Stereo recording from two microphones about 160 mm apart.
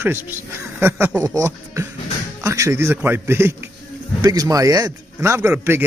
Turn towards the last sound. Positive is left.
turn(degrees=-15)  # may be behind; listen again after turning